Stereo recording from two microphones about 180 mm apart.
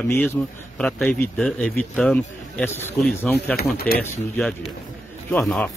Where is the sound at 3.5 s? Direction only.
60° left (ahead or behind).